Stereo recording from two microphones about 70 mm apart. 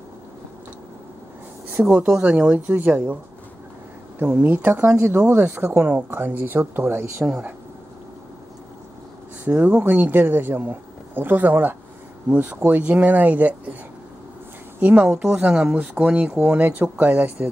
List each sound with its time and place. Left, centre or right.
1.8 s speech: centre
4.2 s speech: right
9.4 s speech: centre
14.8 s speech: right
15.7 s speech: right